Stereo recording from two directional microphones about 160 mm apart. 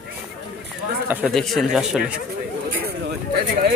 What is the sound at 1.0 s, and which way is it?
Speech, 10° right (ahead or behind).